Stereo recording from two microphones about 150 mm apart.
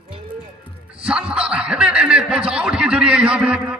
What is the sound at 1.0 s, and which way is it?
Speech, 5° right (ahead or behind).